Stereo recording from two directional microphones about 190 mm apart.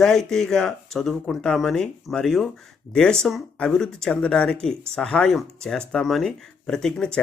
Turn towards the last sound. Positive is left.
turn(degrees=5)  # may be behind; listen again after turning